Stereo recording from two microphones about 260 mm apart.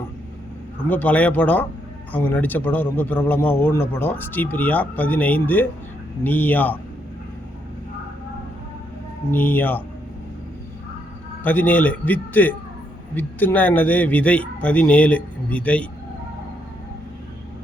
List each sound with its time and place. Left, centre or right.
0.9 s speech: centre
9.3 s speech: centre
11.4 s speech: centre